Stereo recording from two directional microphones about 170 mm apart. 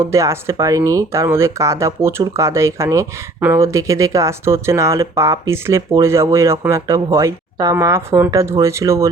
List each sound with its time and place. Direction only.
0.0 s speech: 15° right (ahead or behind)